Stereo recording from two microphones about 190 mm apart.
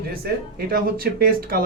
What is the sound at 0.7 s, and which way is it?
Speech, 50° right (ahead or behind).